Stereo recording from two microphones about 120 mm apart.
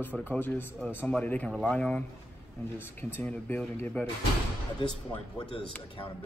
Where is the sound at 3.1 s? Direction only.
15° left (ahead or behind).